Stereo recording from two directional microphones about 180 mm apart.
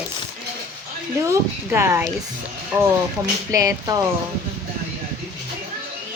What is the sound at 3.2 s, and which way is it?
Speech, 20° right (ahead or behind).